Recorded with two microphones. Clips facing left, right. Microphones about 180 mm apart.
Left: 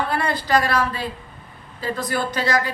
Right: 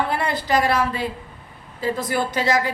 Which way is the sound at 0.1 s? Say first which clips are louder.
Left 1 dB; 20° right (ahead or behind).